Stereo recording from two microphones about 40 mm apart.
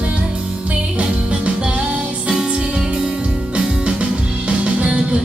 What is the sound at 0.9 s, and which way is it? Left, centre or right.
Music, right.